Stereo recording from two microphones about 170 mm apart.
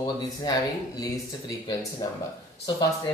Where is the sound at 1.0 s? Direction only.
25° left (ahead or behind).